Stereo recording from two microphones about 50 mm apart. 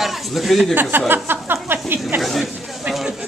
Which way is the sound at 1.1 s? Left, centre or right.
Right.